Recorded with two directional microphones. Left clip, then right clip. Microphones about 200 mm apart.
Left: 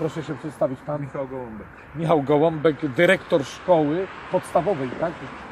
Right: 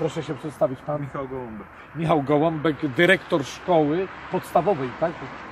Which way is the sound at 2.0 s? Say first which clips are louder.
Left 2 dB; 20° left (ahead or behind).